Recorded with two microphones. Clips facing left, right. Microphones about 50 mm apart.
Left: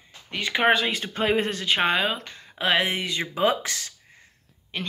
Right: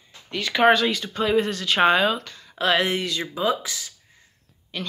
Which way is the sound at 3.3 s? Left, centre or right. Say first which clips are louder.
Left 2 dB; left.